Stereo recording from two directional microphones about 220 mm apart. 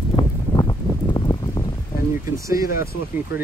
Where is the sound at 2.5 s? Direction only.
40° left (ahead or behind).